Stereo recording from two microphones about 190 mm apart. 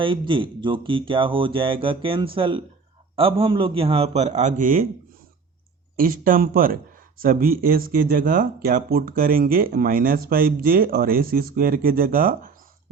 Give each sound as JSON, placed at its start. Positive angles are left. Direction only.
{"t": 0.0, "sound": "a man's voice", "side_deg": -25}
{"t": 6.0, "sound": "speech", "side_deg": -50}